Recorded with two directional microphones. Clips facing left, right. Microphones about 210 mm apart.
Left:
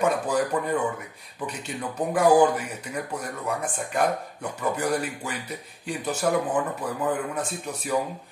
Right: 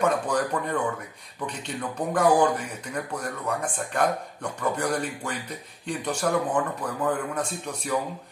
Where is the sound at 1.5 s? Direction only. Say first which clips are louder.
Right 1 dB; 10° left (ahead or behind).